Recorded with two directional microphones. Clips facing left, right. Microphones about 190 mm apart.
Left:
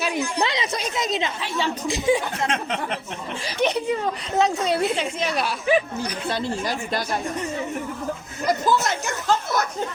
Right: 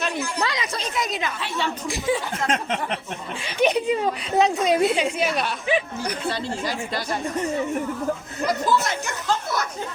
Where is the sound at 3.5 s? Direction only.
15° right (ahead or behind).